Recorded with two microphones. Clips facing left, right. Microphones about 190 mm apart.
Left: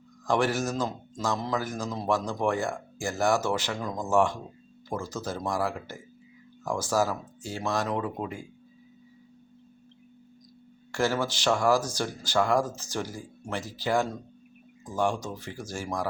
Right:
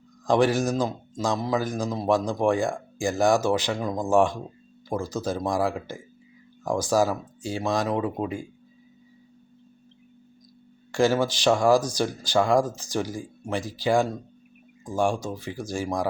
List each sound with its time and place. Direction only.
0.3 s speech: 15° right (ahead or behind)
10.9 s speech: 15° right (ahead or behind)